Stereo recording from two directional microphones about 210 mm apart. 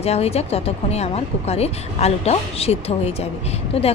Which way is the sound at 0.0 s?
30° left (ahead or behind).